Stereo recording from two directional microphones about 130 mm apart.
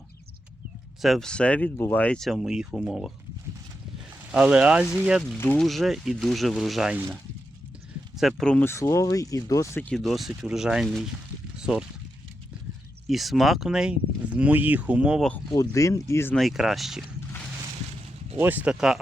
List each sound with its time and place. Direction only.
1.0 s speech: centre (ahead or behind)
4.3 s speech: 5° right (ahead or behind)
8.1 s speech: centre (ahead or behind)
8.6 s speech: 20° left (ahead or behind)
9.8 s speech: 5° left (ahead or behind)
11.5 s a sound: 5° right (ahead or behind)
13.1 s speech: centre (ahead or behind)
15.5 s speech: 25° left (ahead or behind)
16.3 s speech: centre (ahead or behind)
18.3 s speech: 15° right (ahead or behind)